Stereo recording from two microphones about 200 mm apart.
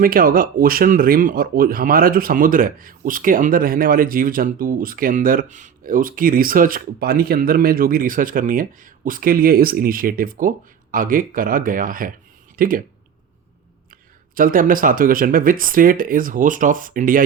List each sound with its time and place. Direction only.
0.0 s speech: 45° right (ahead or behind)
14.3 s speech: 45° right (ahead or behind)